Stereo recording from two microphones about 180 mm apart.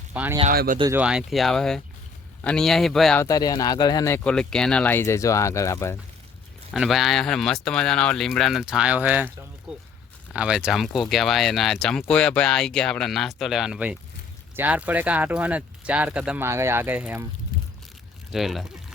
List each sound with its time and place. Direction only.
0.1 s speech: 10° right (ahead or behind)
0.5 s speech: 60° right (ahead or behind)
0.9 s speech: 5° right (ahead or behind)
3.2 s speech: 20° left (ahead or behind)
6.7 s speech: centre (ahead or behind)
10.3 s speech: 5° right (ahead or behind)
17.5 s a sound: 50° left (ahead or behind)
18.3 s speech: centre (ahead or behind)